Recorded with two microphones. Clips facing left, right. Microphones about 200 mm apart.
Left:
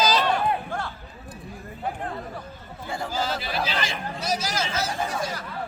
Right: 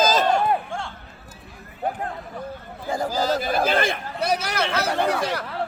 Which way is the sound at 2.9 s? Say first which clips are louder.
Right 6 dB; 40° right (ahead or behind).